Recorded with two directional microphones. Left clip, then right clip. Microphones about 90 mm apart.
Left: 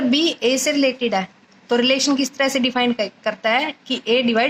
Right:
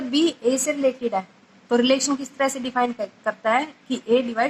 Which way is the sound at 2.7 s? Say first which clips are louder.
Left 3 dB; 40° left (ahead or behind).